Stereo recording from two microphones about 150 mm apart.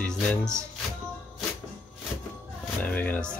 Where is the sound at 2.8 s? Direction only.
10° left (ahead or behind).